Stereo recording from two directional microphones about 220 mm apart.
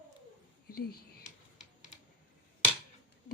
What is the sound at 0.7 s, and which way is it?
Speech, 45° left (ahead or behind).